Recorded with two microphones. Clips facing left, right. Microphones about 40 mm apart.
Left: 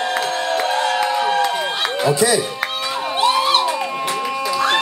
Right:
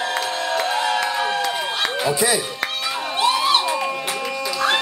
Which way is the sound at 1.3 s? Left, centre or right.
Centre.